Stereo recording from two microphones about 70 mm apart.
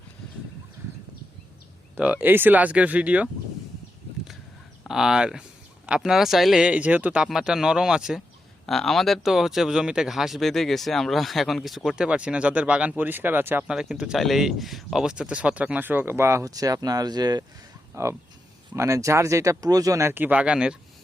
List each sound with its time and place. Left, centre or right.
2.0 s speech: right
4.9 s speech: centre
7.3 s speech: centre
8.6 s speech: centre
12.0 s speech: centre
13.0 s speech: right
13.7 s speech: centre
15.0 s speech: centre; by 16.4 s right
16.4 s speech: right
17.9 s speech: right
20.1 s speech: right
20.3 s speech: centre